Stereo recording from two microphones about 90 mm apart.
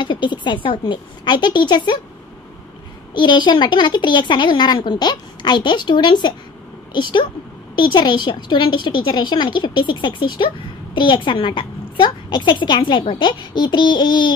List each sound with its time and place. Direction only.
0.0 s a woman's voice: 60° left (ahead or behind)
3.2 s a woman's voice: 55° left (ahead or behind)